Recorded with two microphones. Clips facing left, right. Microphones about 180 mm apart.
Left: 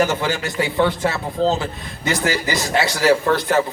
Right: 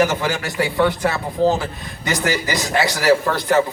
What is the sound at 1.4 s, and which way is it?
A man's voice, 15° right (ahead or behind).